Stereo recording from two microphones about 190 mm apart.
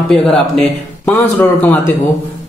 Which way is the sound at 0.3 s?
5° left (ahead or behind).